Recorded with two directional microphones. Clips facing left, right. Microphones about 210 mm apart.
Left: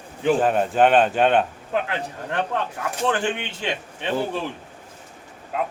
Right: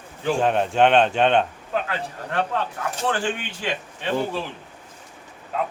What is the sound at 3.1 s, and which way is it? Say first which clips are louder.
Speech: left 1 dB; 20° left (ahead or behind).